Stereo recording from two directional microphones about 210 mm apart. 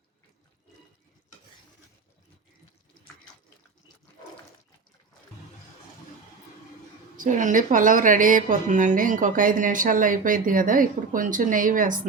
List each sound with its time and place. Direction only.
7.2 s a woman's voice: 35° right (ahead or behind)